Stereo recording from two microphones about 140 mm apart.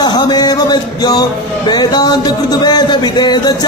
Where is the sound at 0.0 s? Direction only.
30° left (ahead or behind).